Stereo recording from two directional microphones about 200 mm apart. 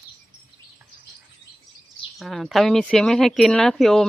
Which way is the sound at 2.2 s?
Centre (ahead or behind).